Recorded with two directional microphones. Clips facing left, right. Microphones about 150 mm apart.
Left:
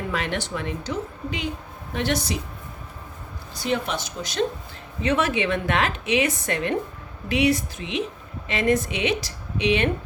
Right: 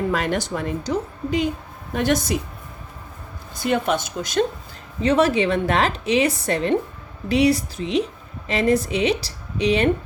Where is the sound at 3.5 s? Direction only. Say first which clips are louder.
Right 5 dB; 50° right (ahead or behind).